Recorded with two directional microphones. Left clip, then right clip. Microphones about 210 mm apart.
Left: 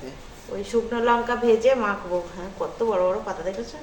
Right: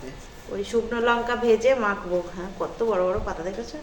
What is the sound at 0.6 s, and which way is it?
A woman's voice, 20° right (ahead or behind).